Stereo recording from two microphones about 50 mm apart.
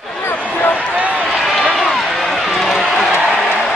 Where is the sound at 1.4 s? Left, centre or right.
Centre.